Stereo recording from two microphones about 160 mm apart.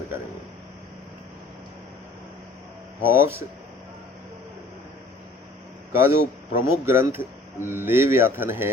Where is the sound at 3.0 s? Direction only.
15° right (ahead or behind).